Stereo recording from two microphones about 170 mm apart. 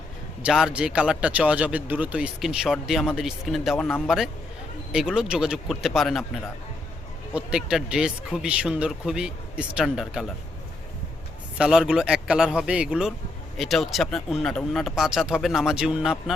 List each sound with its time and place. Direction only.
0.4 s speech: 5° right (ahead or behind)
7.3 s speech: 5° right (ahead or behind)
11.5 s speech: 5° right (ahead or behind)